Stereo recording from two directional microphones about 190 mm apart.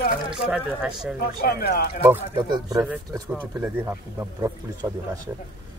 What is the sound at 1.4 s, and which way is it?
Speech, 55° left (ahead or behind).